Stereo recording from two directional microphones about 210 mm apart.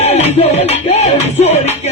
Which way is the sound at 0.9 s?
30° left (ahead or behind).